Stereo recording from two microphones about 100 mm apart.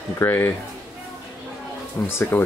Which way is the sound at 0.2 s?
25° left (ahead or behind).